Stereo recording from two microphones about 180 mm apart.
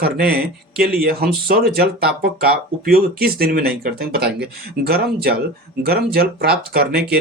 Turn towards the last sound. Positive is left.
turn(degrees=-60)  # may be behind; listen again after turning